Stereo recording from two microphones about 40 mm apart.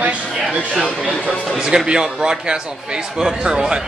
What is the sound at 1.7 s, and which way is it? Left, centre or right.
Speech, centre.